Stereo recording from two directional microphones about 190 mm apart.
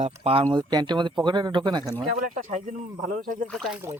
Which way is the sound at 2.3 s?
40° right (ahead or behind).